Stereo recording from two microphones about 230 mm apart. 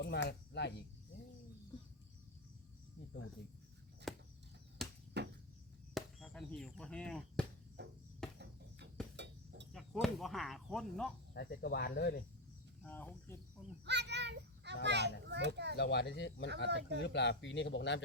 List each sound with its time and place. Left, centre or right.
0.3 s speech: left
4.1 s a sound: centre
5.2 s cricket: right
5.9 s speech: centre
7.8 s cricket: right
8.2 s cricket: centre
9.1 s a sound: right
9.7 s speech: centre
11.3 s speech: left
12.8 s speech: centre
13.8 s a child's voice: right
15.7 s speech: left
16.6 s a child's voice: right
17.0 s speech: left